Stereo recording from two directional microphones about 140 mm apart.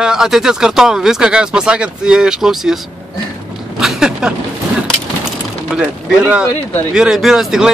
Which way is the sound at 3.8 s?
5° right (ahead or behind).